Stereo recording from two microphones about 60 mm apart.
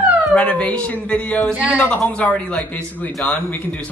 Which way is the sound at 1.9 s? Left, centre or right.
Left.